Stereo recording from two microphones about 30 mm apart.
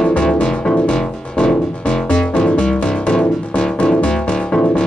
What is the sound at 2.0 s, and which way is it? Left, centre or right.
Music, left.